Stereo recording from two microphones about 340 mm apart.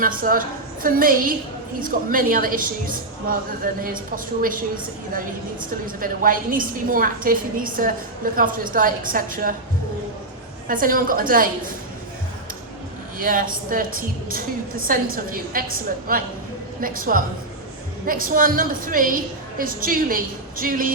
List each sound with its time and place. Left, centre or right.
0.0 s a woman's voice: right
10.7 s a woman's voice: right
13.1 s a woman's voice: right